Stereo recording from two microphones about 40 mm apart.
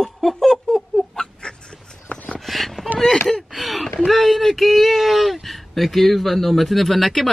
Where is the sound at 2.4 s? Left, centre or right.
Centre.